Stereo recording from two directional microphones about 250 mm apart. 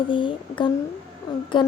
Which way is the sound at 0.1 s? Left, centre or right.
Centre.